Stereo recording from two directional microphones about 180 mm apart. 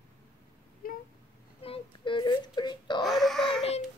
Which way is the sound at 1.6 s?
30° left (ahead or behind).